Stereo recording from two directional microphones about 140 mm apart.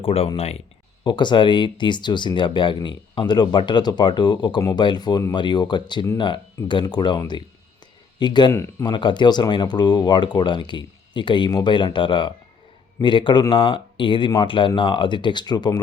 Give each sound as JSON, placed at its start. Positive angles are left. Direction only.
{"t": 0.0, "sound": "speech", "side_deg": 40}
{"t": 1.0, "sound": "speech", "side_deg": 35}
{"t": 8.5, "sound": "speech", "side_deg": 20}
{"t": 8.9, "sound": "speech", "side_deg": 35}